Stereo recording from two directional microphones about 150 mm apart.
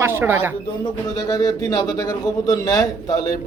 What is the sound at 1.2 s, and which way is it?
A man's voice, 25° left (ahead or behind).